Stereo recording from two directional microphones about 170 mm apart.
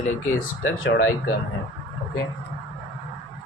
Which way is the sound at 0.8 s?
90° left.